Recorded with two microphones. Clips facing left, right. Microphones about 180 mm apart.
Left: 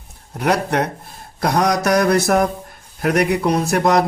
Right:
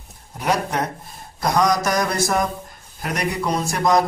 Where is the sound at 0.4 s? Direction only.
65° left (ahead or behind).